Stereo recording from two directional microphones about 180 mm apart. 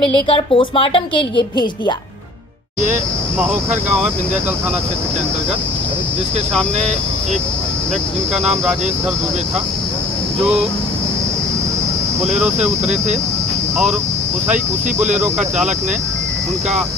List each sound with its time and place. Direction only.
0.3 s a woman's voice: 30° left (ahead or behind)
15.0 s speech: 40° right (ahead or behind)